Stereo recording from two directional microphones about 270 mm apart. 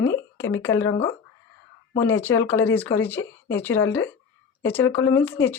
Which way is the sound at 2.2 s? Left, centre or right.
Centre.